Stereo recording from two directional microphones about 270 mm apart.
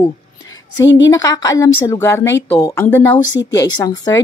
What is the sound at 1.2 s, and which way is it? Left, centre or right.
A woman's voice, centre.